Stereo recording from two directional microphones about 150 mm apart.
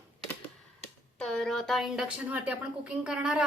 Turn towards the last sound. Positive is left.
turn(degrees=-5)  # may be behind; listen again after turning